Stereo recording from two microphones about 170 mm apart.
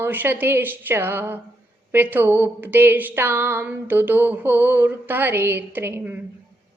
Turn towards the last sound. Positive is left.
turn(degrees=-15)  # may be behind; listen again after turning